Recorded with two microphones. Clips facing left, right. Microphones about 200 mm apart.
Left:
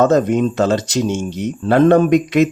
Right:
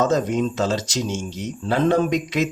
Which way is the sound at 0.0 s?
60° left (ahead or behind).